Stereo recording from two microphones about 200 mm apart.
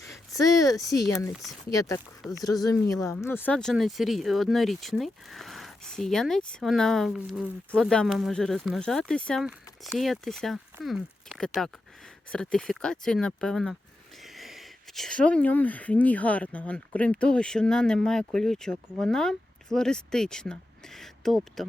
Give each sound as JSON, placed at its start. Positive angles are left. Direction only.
{"t": 0.3, "sound": "speech", "side_deg": 15}